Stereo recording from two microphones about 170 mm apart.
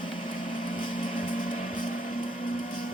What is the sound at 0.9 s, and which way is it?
Music, 50° left (ahead or behind).